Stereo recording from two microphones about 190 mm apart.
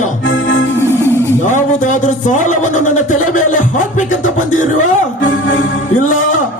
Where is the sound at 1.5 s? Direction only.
40° left (ahead or behind).